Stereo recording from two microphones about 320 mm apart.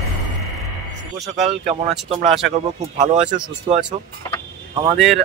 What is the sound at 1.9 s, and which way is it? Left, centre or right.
Speech, centre.